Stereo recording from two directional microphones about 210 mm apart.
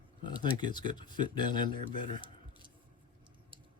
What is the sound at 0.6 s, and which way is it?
Speech, 20° left (ahead or behind).